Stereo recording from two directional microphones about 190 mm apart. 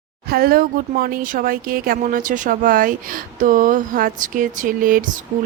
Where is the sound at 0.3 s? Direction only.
50° right (ahead or behind).